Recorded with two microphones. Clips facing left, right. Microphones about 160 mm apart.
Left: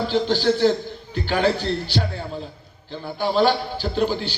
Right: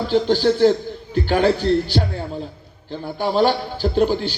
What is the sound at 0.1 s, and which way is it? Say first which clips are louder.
A man's voice: right 5 dB; 50° right (ahead or behind).